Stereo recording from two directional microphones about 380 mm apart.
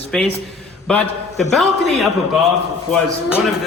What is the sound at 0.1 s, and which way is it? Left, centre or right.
A man's voice, centre.